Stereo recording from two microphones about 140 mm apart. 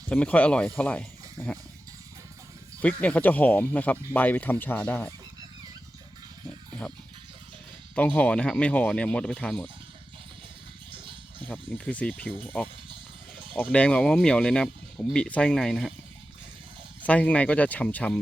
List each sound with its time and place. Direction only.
0.1 s speech: 10° left (ahead or behind)
2.8 s speech: 10° left (ahead or behind)
7.9 s speech: 10° left (ahead or behind)
10.9 s a sound: 35° right (ahead or behind)
11.4 s speech: 10° left (ahead or behind)
13.6 s speech: 10° left (ahead or behind)
17.0 s speech: 10° left (ahead or behind)